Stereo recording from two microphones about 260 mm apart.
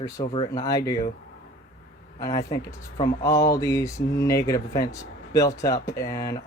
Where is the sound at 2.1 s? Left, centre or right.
Centre.